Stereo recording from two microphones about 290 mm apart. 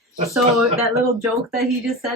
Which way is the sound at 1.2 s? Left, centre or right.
Centre.